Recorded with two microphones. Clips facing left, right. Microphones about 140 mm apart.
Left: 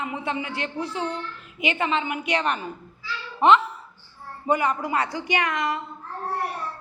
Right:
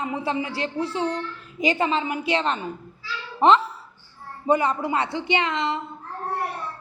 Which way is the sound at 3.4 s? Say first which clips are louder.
Even; 35° right (ahead or behind).